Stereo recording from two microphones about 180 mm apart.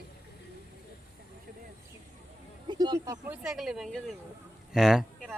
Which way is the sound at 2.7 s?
25° right (ahead or behind).